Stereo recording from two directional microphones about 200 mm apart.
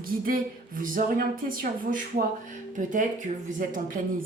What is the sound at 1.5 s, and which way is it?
Speech, 45° right (ahead or behind).